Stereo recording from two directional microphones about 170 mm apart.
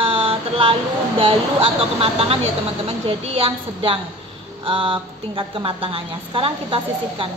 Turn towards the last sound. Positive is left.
turn(degrees=-30)  # may be behind; listen again after turning